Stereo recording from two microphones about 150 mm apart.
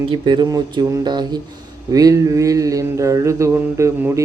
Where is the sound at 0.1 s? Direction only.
30° right (ahead or behind).